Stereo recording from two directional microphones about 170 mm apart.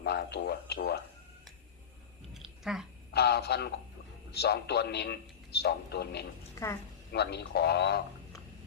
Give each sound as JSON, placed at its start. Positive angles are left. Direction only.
{"t": 0.0, "sound": "a man's voice", "side_deg": 75}
{"t": 2.3, "sound": "a sound", "side_deg": 0}
{"t": 3.1, "sound": "a man's voice", "side_deg": 70}
{"t": 6.6, "sound": "a woman's voice", "side_deg": 15}
{"t": 7.1, "sound": "a man's voice", "side_deg": 75}